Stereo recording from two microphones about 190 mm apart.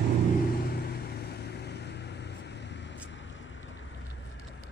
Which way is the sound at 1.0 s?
55° left (ahead or behind).